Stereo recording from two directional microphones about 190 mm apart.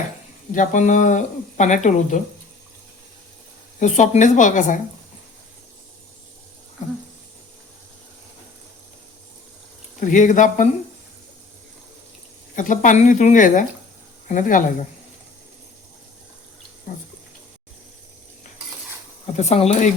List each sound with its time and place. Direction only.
0.5 s speech: 40° left (ahead or behind)
3.8 s speech: 40° left (ahead or behind)
10.0 s speech: 45° left (ahead or behind)
12.5 s speech: 40° left (ahead or behind)
16.9 s speech: 45° left (ahead or behind)
19.4 s speech: 35° left (ahead or behind)